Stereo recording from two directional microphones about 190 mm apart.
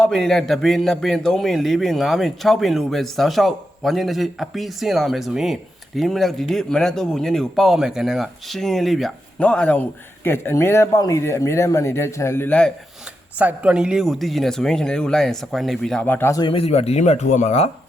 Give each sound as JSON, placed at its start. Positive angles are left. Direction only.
{"t": 0.0, "sound": "a man's voice", "side_deg": 0}
{"t": 13.4, "sound": "a man's voice", "side_deg": -5}
{"t": 16.5, "sound": "speech", "side_deg": 30}